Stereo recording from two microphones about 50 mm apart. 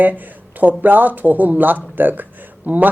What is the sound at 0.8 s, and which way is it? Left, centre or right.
Speech, right.